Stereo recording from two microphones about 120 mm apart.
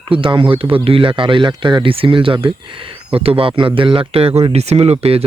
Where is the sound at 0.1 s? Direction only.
45° right (ahead or behind).